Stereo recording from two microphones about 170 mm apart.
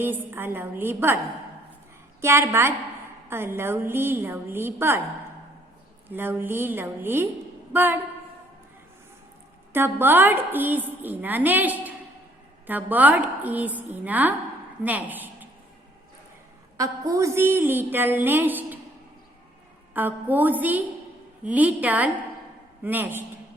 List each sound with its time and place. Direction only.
0.0 s a woman's voice: 10° right (ahead or behind)
2.2 s a woman's voice: 15° right (ahead or behind)
6.1 s a woman's voice: 10° right (ahead or behind)
9.7 s a woman's voice: 10° right (ahead or behind)
16.7 s a woman's voice: 20° right (ahead or behind)
19.9 s a woman's voice: 10° right (ahead or behind)